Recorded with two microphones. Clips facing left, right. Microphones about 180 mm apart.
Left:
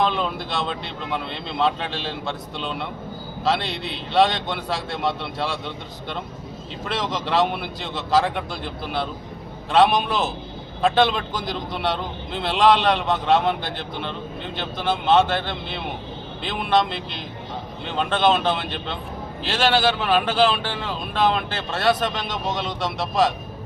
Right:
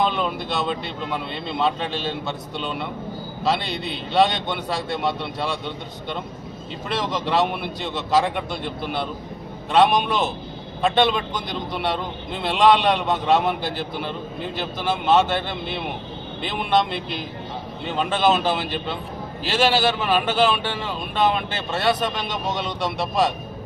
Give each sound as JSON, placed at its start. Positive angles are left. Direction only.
{"t": 0.0, "sound": "speech", "side_deg": 0}